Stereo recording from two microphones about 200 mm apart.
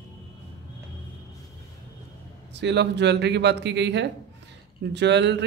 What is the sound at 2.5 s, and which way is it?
Speech, 60° right (ahead or behind).